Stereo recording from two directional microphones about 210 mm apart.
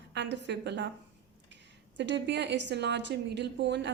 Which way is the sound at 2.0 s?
55° right (ahead or behind).